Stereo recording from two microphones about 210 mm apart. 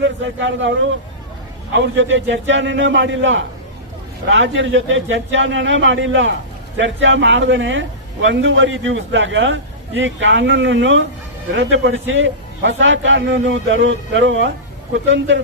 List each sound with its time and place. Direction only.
0.0 s a man's voice: 60° right (ahead or behind)
1.7 s a man's voice: 60° right (ahead or behind)